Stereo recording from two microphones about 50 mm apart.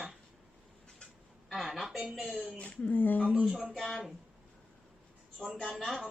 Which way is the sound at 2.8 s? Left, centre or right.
Left.